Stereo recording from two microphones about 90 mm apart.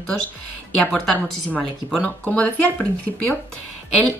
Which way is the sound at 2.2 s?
15° left (ahead or behind).